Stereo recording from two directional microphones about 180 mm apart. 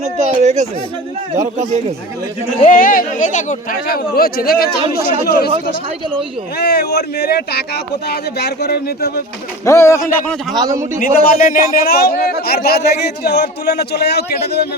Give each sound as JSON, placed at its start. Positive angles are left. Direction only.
{"t": 0.2, "sound": "speech", "side_deg": -40}
{"t": 2.6, "sound": "speech", "side_deg": 50}
{"t": 6.6, "sound": "a man's voice", "side_deg": 65}
{"t": 9.6, "sound": "speech", "side_deg": 15}
{"t": 10.5, "sound": "a man's voice", "side_deg": -20}
{"t": 11.0, "sound": "a man's voice", "side_deg": 50}